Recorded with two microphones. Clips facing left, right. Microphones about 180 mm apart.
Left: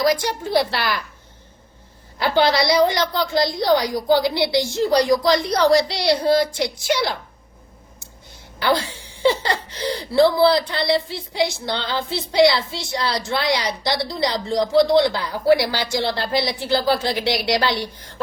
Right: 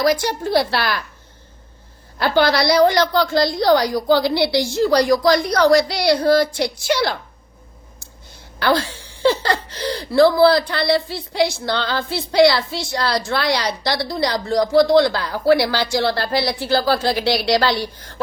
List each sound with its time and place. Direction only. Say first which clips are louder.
0.8 s speech: right 2 dB; 15° left (ahead or behind)
2.1 s a woman's voice: right 1 dB; 20° left (ahead or behind)
8.5 s a woman's voice: right 2 dB; 20° left (ahead or behind)